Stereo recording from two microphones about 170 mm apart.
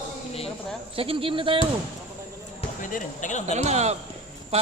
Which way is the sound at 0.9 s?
35° right (ahead or behind).